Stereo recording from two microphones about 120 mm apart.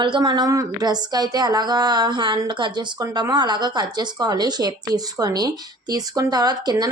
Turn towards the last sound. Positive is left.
turn(degrees=-35)  # may be behind; listen again after turning